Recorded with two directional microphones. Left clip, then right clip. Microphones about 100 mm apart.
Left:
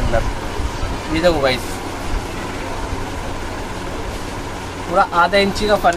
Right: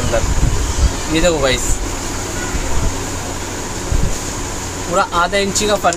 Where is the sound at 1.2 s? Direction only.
35° right (ahead or behind).